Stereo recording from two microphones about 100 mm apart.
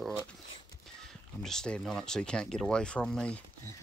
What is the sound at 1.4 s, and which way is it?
Speech, 5° left (ahead or behind).